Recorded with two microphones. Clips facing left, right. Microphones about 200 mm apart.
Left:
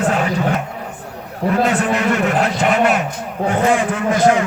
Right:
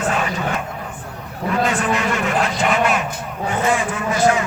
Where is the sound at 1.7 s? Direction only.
60° left (ahead or behind).